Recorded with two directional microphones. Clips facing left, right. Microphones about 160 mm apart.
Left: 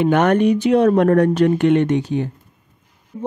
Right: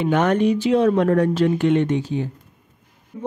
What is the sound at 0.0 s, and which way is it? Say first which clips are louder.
Speech: left 3 dB; 60° left (ahead or behind).